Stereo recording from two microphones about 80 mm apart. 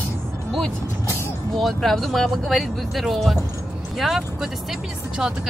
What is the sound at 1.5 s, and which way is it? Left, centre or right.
Speech, centre.